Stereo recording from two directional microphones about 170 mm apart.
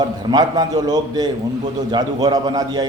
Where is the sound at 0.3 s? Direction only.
25° right (ahead or behind).